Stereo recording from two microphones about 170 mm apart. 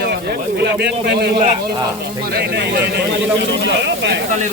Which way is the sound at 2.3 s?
80° right.